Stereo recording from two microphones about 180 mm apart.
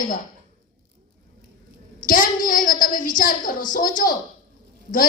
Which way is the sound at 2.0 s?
50° left (ahead or behind).